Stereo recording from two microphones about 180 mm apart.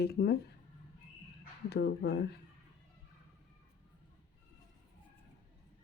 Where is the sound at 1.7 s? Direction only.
65° left (ahead or behind).